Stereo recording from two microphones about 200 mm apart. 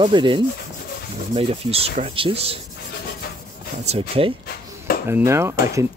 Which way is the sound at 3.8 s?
30° right (ahead or behind).